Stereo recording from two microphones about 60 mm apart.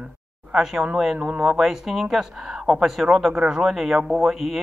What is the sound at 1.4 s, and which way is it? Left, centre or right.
Speech, centre.